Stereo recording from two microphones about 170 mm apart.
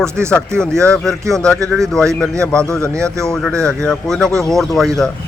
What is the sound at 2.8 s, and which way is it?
Speech, 15° right (ahead or behind).